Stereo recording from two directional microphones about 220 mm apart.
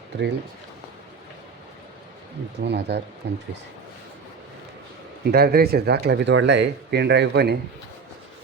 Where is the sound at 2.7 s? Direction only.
50° right (ahead or behind).